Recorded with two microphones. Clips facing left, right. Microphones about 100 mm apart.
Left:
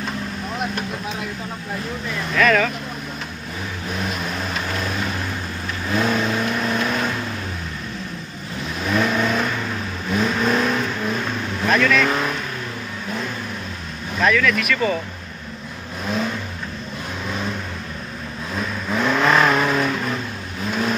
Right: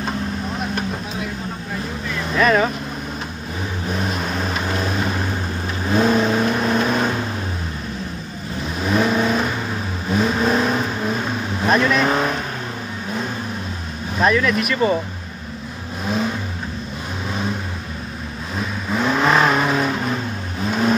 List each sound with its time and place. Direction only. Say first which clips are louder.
2.3 s speech: right 1 dB; 25° right (ahead or behind)
3.9 s vehicle: right 2 dB; 30° right (ahead or behind)
8.8 s vehicle: right 2 dB; 20° right (ahead or behind)
14.1 s vehicle: right 1 dB; 25° right (ahead or behind)
18.6 s vehicle: right 1 dB; 10° right (ahead or behind)